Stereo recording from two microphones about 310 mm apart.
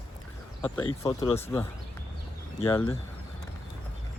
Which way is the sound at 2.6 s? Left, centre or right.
Centre.